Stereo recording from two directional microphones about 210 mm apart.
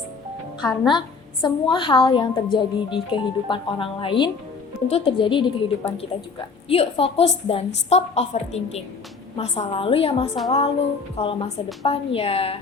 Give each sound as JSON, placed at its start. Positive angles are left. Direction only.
{"t": 0.6, "sound": "a woman's voice", "side_deg": 20}